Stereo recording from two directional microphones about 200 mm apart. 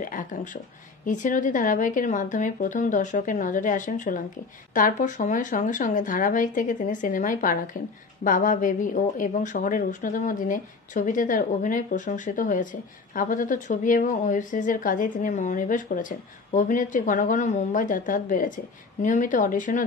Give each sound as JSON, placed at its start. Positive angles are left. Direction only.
{"t": 0.0, "sound": "speech", "side_deg": 40}